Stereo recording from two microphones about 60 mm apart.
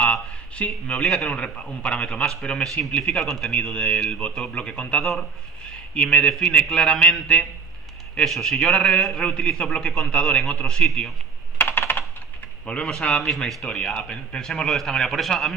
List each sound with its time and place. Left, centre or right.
0.1 s a sound: centre
1.0 s a man's voice: centre
1.3 s a man's voice: centre
2.6 s speech: centre
2.9 s a man's voice: centre
3.2 s a man's voice: centre
11.5 s computer keyboard: left
13.0 s a man's voice: centre
13.7 s a man's voice: centre
14.4 s speech: centre